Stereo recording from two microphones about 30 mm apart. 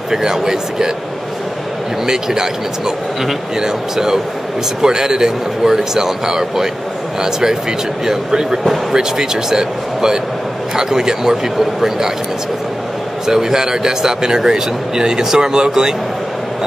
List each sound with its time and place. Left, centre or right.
0.1 s speech: centre
2.0 s speech: centre
3.6 s speech: centre
13.3 s speech: centre